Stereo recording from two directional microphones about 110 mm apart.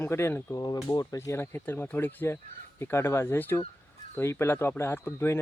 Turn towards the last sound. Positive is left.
turn(degrees=20)  # may be behind; listen again after turning